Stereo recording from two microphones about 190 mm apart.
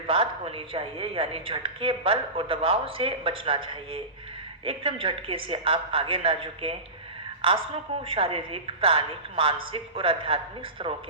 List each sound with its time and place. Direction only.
0.1 s a woman's voice: 30° right (ahead or behind)